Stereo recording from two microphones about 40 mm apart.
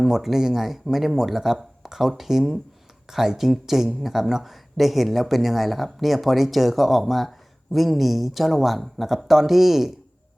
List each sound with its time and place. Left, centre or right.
0.0 s speech: centre